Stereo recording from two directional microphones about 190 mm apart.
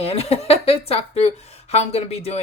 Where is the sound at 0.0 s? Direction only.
30° left (ahead or behind).